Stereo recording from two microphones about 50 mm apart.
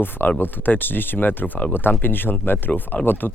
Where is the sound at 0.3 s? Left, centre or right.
Left.